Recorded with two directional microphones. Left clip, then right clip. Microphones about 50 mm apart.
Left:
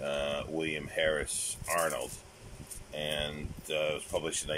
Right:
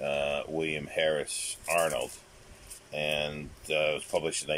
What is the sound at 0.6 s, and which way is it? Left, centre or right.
Speech, right.